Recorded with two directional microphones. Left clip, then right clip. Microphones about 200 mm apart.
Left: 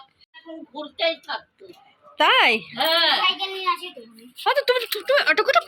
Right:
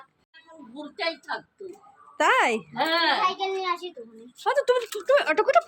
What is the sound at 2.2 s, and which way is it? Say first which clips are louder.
Speech: left 4 dB; 5° right (ahead or behind).